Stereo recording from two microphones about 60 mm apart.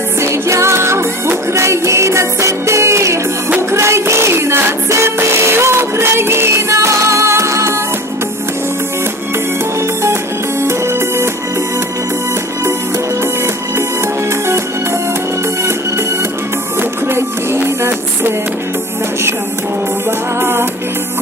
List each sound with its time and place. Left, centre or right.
0.2 s music: right
10.6 s music: right
17.1 s music: right
20.1 s music: right